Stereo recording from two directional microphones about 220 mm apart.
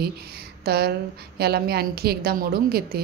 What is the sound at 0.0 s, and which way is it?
A woman's voice, 45° right (ahead or behind).